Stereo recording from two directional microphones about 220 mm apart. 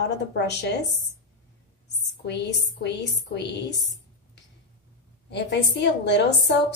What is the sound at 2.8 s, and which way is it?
Speech, 50° left (ahead or behind).